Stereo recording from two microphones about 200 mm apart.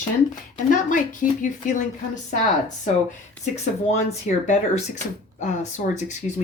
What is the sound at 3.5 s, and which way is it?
Speech, 35° left (ahead or behind).